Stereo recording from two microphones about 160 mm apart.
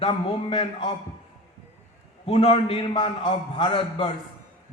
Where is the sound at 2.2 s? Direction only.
35° left (ahead or behind).